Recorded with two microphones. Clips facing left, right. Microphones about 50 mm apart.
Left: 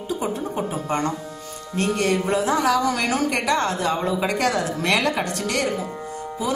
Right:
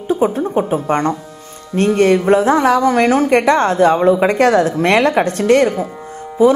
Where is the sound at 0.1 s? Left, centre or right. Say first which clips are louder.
Right 11 dB; right.